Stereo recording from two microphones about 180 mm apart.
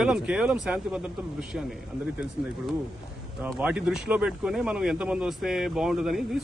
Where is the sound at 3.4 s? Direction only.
5° right (ahead or behind).